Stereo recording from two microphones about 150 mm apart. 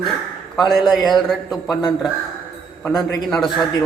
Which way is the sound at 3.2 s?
Centre (ahead or behind).